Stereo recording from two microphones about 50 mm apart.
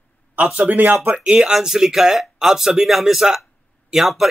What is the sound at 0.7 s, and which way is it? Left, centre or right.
Speech, right.